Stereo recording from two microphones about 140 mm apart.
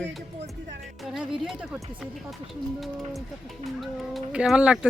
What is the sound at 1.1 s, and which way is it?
Speech, 5° right (ahead or behind).